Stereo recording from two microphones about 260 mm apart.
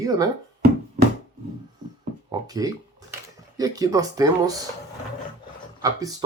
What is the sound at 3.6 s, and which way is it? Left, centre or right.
Speech, centre.